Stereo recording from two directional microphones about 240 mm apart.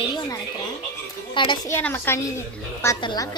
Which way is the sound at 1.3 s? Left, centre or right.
Centre.